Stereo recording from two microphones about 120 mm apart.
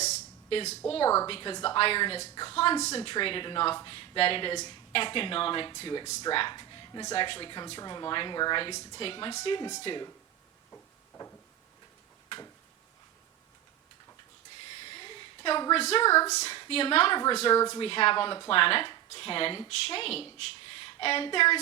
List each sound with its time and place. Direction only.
0.0 s a sound: 65° left (ahead or behind)
1.0 s speech: 20° left (ahead or behind)
1.3 s speech: 45° left (ahead or behind)
10.7 s a sound: 15° left (ahead or behind)
14.6 s a sound: 45° left (ahead or behind)
15.8 s speech: 60° left (ahead or behind)
16.0 s speech: 25° left (ahead or behind)
16.3 s speech: 65° left (ahead or behind)
16.6 s a woman's voice: 50° left (ahead or behind)
17.5 s speech: 30° left (ahead or behind)
17.7 s speech: 50° left (ahead or behind)
20.7 s a sound: 50° left (ahead or behind)